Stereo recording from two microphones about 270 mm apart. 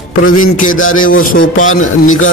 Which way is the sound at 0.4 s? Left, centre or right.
Left.